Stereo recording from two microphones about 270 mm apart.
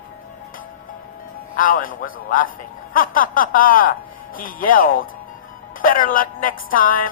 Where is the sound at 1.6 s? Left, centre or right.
Left.